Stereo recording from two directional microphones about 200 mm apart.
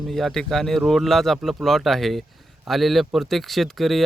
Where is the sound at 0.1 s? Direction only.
Centre (ahead or behind).